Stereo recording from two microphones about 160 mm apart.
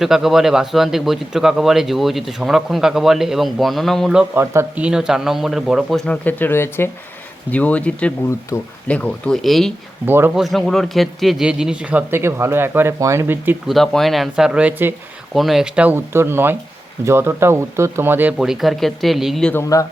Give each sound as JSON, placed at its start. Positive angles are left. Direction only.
{"t": 0.0, "sound": "a man's voice", "side_deg": 0}
{"t": 8.9, "sound": "a man's voice", "side_deg": 5}
{"t": 10.1, "sound": "speech", "side_deg": -15}
{"t": 10.3, "sound": "speech", "side_deg": 0}
{"t": 13.7, "sound": "a man's voice", "side_deg": 0}
{"t": 15.4, "sound": "a man's voice", "side_deg": 0}